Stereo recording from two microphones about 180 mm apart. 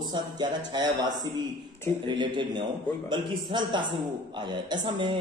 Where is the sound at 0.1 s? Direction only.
25° right (ahead or behind).